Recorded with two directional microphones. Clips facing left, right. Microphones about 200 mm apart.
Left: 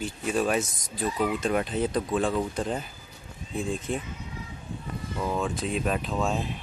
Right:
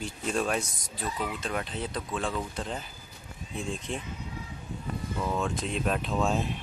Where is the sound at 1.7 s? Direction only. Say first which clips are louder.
Left 8 dB; 45° left (ahead or behind).